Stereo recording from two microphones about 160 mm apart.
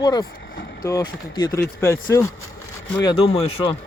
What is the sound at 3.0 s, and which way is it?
Speech, 30° left (ahead or behind).